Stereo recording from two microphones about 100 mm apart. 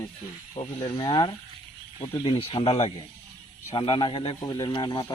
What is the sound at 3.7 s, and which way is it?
Speech, 60° left (ahead or behind).